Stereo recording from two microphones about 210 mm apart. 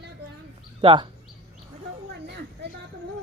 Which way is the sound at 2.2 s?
55° right (ahead or behind).